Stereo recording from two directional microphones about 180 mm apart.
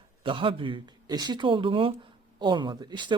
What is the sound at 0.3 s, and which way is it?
Speech, 30° right (ahead or behind).